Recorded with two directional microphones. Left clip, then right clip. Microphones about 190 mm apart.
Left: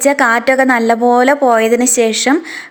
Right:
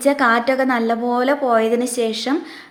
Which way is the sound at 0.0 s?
35° left (ahead or behind).